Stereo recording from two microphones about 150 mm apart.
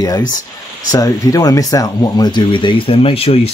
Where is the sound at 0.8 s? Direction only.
25° left (ahead or behind).